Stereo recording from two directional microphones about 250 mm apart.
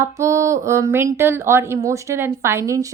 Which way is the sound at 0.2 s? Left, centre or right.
Centre.